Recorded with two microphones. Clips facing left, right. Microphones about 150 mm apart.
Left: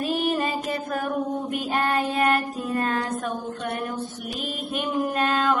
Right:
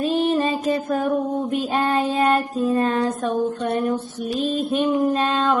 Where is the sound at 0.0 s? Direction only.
25° right (ahead or behind).